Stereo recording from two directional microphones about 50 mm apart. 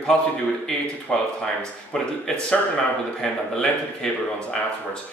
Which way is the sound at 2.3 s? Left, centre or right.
Centre.